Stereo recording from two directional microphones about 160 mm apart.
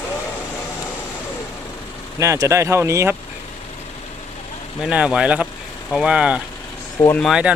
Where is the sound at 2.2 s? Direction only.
20° right (ahead or behind).